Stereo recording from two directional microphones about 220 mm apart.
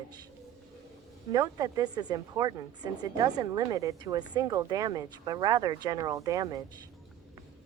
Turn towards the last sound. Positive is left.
turn(degrees=-15)  # may be behind; listen again after turning